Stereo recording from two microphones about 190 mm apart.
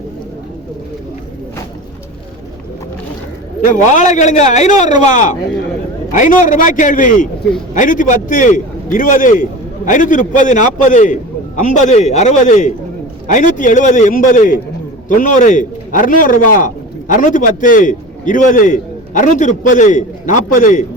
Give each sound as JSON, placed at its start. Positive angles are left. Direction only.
{"t": 3.9, "sound": "a man's voice", "side_deg": 40}